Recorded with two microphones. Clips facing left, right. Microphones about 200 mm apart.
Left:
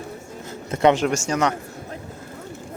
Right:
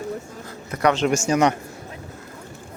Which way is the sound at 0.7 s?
25° left (ahead or behind).